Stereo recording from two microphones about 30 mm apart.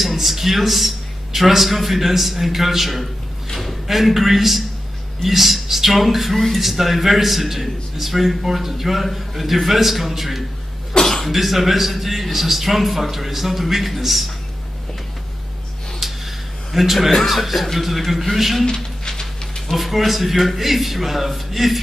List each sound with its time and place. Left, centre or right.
0.0 s speech: centre
10.9 s cough: centre
11.3 s speech: centre
16.0 s a sound: centre
16.7 s speech: centre
19.0 s a sound: left
19.7 s speech: centre